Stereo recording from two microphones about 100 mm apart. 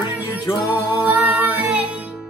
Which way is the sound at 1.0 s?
15° right (ahead or behind).